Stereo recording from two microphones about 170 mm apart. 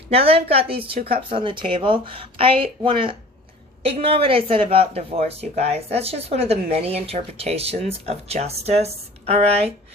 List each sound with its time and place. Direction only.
0.1 s speech: 35° right (ahead or behind)
0.9 s speech: 60° right (ahead or behind)
1.3 s speech: 30° right (ahead or behind)